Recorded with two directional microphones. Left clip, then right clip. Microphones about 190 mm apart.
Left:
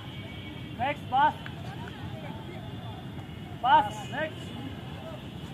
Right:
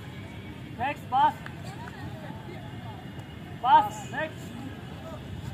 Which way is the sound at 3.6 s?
20° left (ahead or behind).